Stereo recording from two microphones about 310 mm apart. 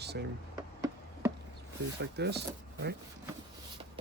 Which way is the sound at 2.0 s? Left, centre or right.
Right.